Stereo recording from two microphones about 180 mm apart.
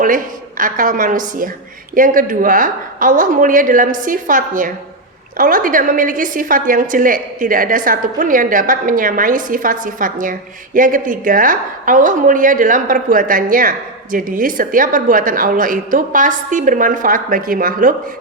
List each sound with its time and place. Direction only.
0.0 s a woman's voice: 50° right (ahead or behind)